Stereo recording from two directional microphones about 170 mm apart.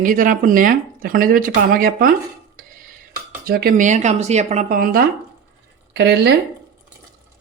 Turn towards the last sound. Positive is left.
turn(degrees=-90)